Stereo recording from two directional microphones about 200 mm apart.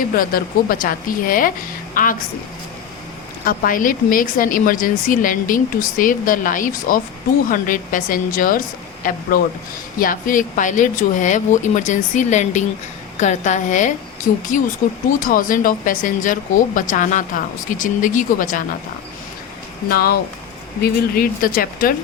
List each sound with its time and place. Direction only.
0.2 s a woman's voice: 45° left (ahead or behind)
3.4 s a woman's voice: 45° left (ahead or behind)
10.0 s a woman's voice: 40° left (ahead or behind)
19.9 s a woman's voice: 50° left (ahead or behind)